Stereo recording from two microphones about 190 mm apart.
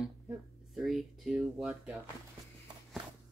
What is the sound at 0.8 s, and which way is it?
Speech, centre (ahead or behind).